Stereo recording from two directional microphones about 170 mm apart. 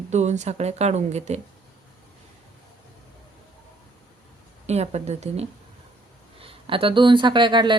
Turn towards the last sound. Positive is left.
turn(degrees=-25)  # may be behind; listen again after turning